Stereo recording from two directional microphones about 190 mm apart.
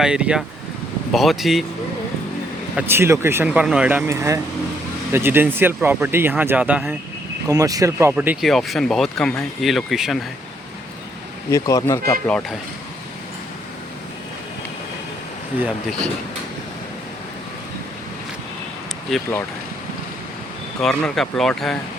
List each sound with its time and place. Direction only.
0.0 s speech: 5° right (ahead or behind)
2.7 s speech: 10° right (ahead or behind)
7.4 s speech: 20° right (ahead or behind); by 10.2 s centre (ahead or behind)
11.5 s speech: 15° left (ahead or behind)
19.1 s speech: centre (ahead or behind)
20.8 s speech: centre (ahead or behind)